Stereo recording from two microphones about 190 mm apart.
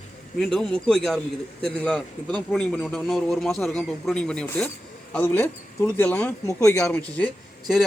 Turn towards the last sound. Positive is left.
turn(degrees=5)  # may be behind; listen again after turning